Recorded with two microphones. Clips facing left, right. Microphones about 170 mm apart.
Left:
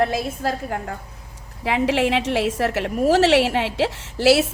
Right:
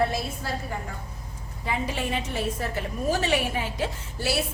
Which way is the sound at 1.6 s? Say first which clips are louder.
Left 10 dB; 85° left.